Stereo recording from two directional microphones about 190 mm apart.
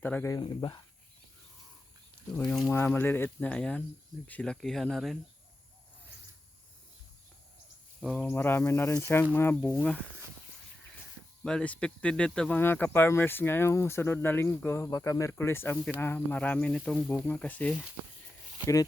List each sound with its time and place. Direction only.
0.0 s speech: 10° left (ahead or behind)
0.4 s speech: 25° left (ahead or behind)
2.3 s speech: 5° left (ahead or behind)
8.0 s speech: centre (ahead or behind)
8.3 s speech: 10° left (ahead or behind)
11.4 s speech: 5° left (ahead or behind)